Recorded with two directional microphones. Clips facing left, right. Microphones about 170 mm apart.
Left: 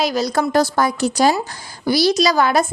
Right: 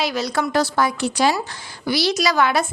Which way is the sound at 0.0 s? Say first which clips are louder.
Left 4 dB; 40° left (ahead or behind).